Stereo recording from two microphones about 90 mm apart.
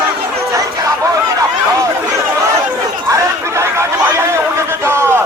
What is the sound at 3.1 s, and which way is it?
Chatter, 30° right (ahead or behind).